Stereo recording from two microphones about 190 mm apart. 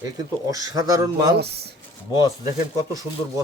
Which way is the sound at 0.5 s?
20° right (ahead or behind).